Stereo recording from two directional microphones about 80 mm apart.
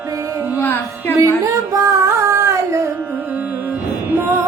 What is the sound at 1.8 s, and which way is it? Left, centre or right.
Female singing, right.